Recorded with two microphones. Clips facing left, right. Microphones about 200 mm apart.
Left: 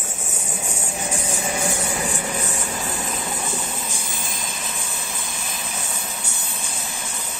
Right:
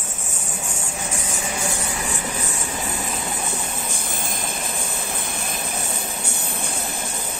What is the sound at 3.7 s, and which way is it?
Vehicle, 55° right (ahead or behind).